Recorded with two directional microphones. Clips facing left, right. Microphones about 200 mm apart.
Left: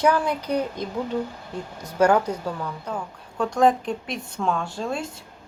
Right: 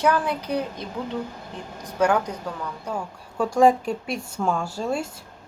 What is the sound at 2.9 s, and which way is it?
Speech, 10° right (ahead or behind).